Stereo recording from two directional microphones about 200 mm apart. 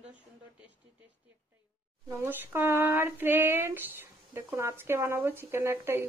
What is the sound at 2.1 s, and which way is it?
Speech, 10° right (ahead or behind).